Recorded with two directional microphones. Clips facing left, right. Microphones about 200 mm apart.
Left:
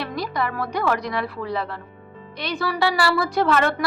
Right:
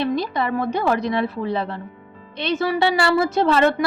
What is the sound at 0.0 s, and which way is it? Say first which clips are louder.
A woman's voice: right 4 dB; 25° right (ahead or behind).